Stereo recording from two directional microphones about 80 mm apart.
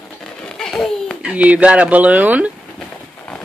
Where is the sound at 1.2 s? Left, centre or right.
Centre.